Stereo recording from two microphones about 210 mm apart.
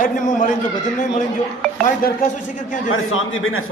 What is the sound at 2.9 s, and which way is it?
Speech, 70° left (ahead or behind).